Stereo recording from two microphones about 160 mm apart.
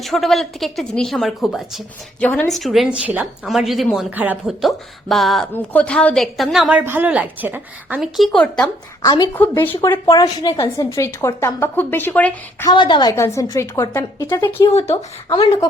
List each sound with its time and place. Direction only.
0.0 s a woman's voice: centre (ahead or behind)
8.6 s a woman's voice: 25° left (ahead or behind)
9.3 s a woman's voice: 10° left (ahead or behind)
12.6 s a woman's voice: 30° left (ahead or behind)